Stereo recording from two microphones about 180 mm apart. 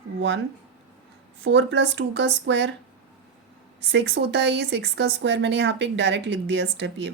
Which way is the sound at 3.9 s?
75° right (ahead or behind).